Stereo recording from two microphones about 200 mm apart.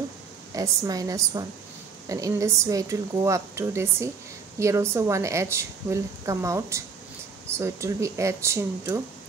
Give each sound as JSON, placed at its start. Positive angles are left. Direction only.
{"t": 0.6, "sound": "a woman's voice", "side_deg": -15}